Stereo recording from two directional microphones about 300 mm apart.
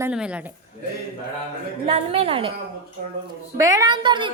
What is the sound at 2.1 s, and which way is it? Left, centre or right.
Speech, centre.